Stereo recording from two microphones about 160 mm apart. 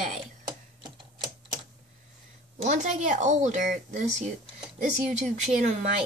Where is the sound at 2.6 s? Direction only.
50° right (ahead or behind).